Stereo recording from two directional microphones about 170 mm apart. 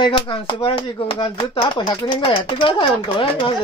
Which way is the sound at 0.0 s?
30° left (ahead or behind).